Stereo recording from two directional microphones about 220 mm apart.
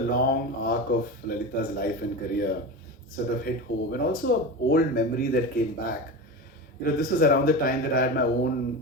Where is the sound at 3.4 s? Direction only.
45° left (ahead or behind).